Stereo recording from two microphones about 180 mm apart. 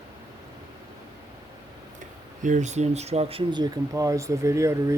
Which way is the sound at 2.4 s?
40° right (ahead or behind).